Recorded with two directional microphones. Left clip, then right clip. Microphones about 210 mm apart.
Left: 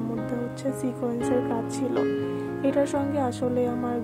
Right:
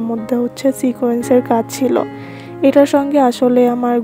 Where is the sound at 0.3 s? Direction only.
40° right (ahead or behind).